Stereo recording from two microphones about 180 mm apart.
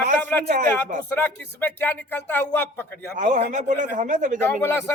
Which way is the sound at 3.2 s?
40° right (ahead or behind).